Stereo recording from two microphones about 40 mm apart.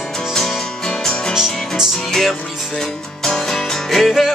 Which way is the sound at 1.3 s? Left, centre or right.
Centre.